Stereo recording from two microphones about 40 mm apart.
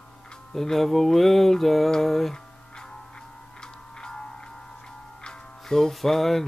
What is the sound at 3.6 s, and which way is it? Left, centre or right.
Music, centre.